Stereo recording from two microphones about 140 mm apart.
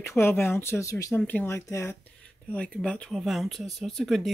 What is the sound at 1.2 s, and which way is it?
Speech, 10° left (ahead or behind).